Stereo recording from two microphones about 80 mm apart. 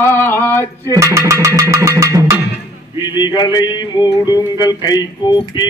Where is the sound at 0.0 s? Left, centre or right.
Left.